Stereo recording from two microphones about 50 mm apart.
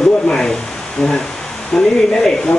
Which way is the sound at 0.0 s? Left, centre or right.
Centre.